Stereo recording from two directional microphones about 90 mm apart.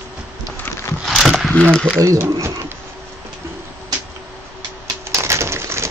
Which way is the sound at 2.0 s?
35° right (ahead or behind).